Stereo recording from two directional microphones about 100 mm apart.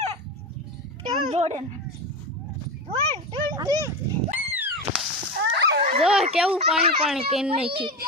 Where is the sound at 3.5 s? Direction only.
35° right (ahead or behind).